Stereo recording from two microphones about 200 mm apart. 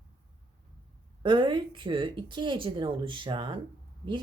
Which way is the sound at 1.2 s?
25° right (ahead or behind).